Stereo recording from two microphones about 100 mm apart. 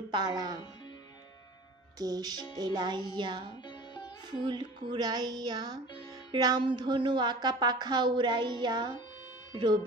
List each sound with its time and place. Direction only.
0.1 s a woman's voice: 45° right (ahead or behind)
2.0 s music: 40° right (ahead or behind)
2.5 s a woman's voice: 45° right (ahead or behind)
3.6 s sitar: 45° left (ahead or behind)
4.4 s a woman's voice: 50° right (ahead or behind)